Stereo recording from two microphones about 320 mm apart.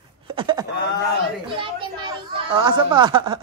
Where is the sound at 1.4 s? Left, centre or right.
Centre.